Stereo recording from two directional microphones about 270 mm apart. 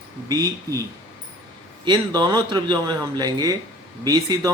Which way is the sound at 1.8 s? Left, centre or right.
Centre.